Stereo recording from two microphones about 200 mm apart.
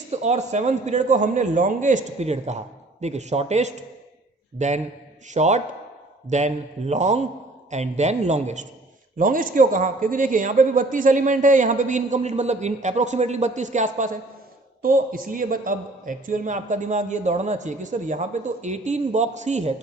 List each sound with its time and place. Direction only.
0.1 s a man's voice: 35° right (ahead or behind)